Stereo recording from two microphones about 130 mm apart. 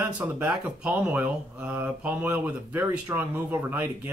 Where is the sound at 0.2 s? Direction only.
10° right (ahead or behind).